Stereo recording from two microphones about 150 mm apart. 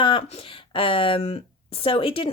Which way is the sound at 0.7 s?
35° left (ahead or behind).